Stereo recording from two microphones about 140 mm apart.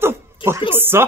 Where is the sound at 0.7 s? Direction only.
15° right (ahead or behind).